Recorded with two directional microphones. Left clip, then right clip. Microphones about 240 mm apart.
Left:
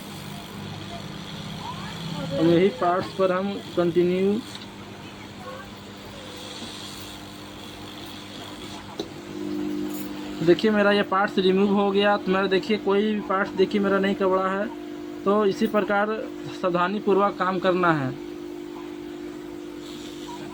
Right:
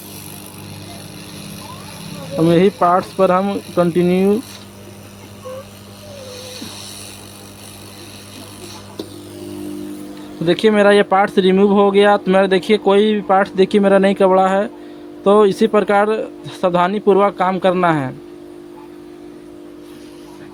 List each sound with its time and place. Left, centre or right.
2.6 s speech: right
10.4 s speech: right